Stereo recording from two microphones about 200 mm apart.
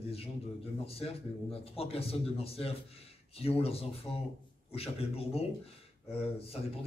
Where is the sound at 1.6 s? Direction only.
30° left (ahead or behind).